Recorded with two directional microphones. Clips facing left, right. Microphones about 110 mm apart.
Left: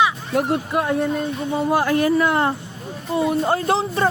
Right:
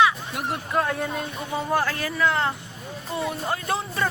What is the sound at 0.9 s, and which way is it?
Speech, centre (ahead or behind).